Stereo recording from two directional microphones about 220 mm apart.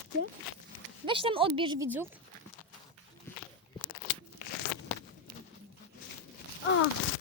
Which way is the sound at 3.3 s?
10° left (ahead or behind).